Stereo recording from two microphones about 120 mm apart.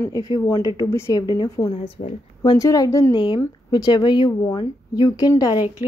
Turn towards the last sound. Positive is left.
turn(degrees=30)  # may be behind; listen again after turning